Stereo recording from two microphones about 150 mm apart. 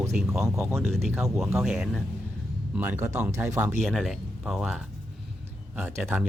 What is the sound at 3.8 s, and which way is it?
Speech, centre (ahead or behind).